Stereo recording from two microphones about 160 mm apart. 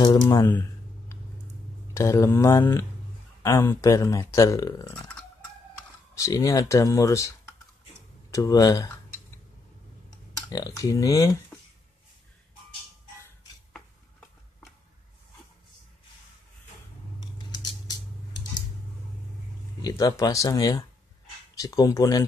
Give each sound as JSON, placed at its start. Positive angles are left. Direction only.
{"t": 0.0, "sound": "speech", "side_deg": 25}
{"t": 0.5, "sound": "a sound", "side_deg": 10}
{"t": 2.0, "sound": "speech", "side_deg": 20}
{"t": 6.1, "sound": "speech", "side_deg": 20}
{"t": 10.5, "sound": "speech", "side_deg": 20}
{"t": 19.8, "sound": "speech", "side_deg": 20}